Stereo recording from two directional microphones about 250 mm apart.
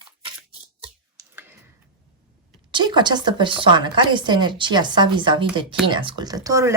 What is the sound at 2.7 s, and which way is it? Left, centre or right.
A woman's voice, centre.